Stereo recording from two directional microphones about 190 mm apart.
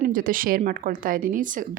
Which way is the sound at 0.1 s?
45° right (ahead or behind).